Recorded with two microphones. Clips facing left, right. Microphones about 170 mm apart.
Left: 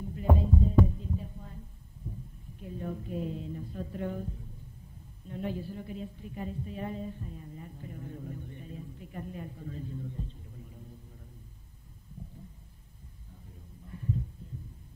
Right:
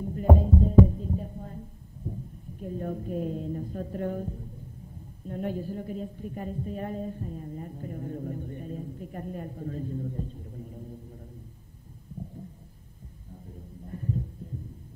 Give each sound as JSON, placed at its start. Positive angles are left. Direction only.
{"t": 0.0, "sound": "music", "side_deg": -45}
{"t": 0.8, "sound": "heart sounds", "side_deg": -45}
{"t": 2.0, "sound": "a sound", "side_deg": -40}
{"t": 5.2, "sound": "speech", "side_deg": -50}
{"t": 13.8, "sound": "heart sounds", "side_deg": -45}